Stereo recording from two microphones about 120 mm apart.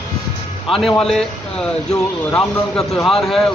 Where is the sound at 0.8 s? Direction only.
Centre (ahead or behind).